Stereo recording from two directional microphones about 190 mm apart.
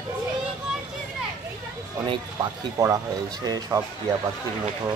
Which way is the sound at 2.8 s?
20° right (ahead or behind).